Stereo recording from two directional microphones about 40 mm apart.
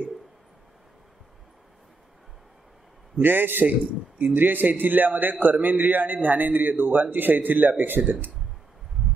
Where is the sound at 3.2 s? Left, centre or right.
Right.